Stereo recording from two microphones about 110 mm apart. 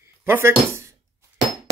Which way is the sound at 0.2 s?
20° right (ahead or behind).